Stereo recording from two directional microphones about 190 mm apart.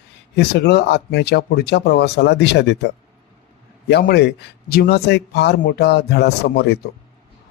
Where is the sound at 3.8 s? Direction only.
60° left (ahead or behind).